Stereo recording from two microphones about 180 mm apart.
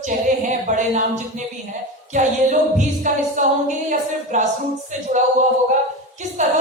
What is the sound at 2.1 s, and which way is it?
Music, 45° right (ahead or behind).